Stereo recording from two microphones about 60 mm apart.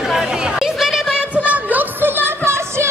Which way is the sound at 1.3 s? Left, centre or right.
Right.